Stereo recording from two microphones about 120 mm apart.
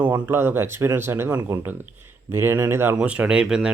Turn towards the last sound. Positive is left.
turn(degrees=-5)  # may be behind; listen again after turning